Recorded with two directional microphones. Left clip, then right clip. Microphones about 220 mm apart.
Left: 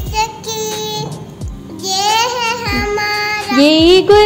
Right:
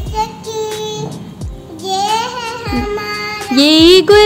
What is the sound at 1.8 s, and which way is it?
Child singing, 15° right (ahead or behind).